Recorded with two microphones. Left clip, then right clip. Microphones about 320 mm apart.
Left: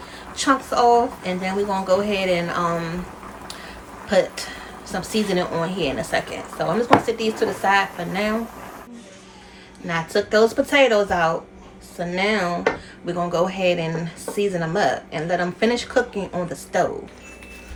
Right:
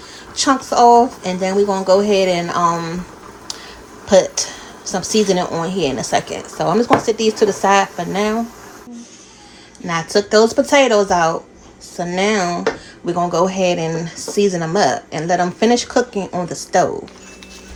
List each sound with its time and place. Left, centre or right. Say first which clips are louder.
0.3 s speech: right 5 dB; centre
4.1 s speech: right 7 dB; centre
9.8 s speech: right 5 dB; right